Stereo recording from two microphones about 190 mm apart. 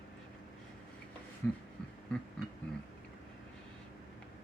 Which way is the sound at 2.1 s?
5° left (ahead or behind).